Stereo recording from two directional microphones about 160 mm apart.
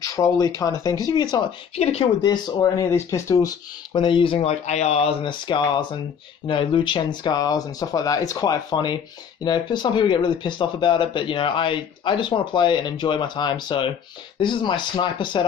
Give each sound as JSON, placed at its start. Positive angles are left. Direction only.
{"t": 0.1, "sound": "speech", "side_deg": 20}
{"t": 1.8, "sound": "speech", "side_deg": 40}
{"t": 2.2, "sound": "speech", "side_deg": 25}